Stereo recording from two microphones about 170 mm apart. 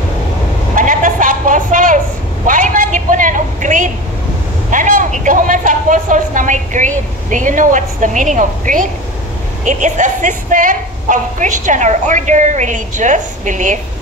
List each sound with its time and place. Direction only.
0.7 s a sound: 50° right (ahead or behind)
4.6 s vehicle: 50° right (ahead or behind)
9.7 s a woman's voice: 45° right (ahead or behind)